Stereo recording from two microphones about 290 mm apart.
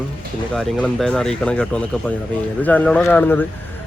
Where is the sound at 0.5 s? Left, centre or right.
Centre.